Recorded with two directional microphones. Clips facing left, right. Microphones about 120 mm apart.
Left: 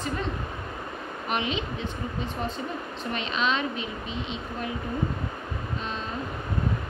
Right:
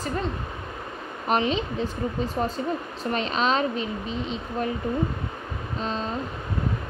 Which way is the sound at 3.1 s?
40° right (ahead or behind).